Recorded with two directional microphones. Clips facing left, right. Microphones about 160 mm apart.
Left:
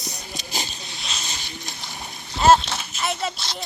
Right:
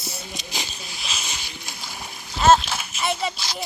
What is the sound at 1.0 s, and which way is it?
Snake, 5° right (ahead or behind).